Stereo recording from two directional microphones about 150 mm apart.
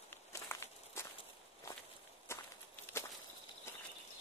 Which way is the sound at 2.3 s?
15° left (ahead or behind).